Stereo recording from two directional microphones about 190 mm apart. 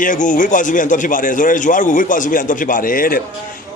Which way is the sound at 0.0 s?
45° left (ahead or behind).